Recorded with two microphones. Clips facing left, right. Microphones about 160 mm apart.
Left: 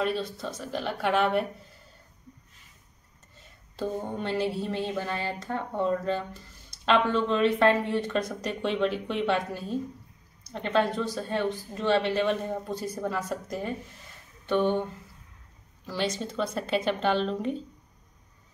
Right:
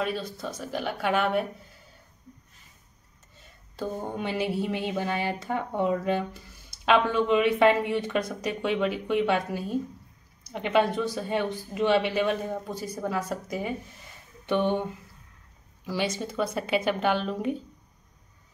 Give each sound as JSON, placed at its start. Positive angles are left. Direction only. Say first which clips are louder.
{"t": 0.0, "sound": "speech", "louder": "left 1 dB", "side_deg": -5}
{"t": 3.7, "sound": "speech", "louder": "left 1 dB", "side_deg": -5}
{"t": 14.4, "sound": "a sound", "louder": "even", "side_deg": -15}
{"t": 15.8, "sound": "speech", "louder": "right 1 dB", "side_deg": -10}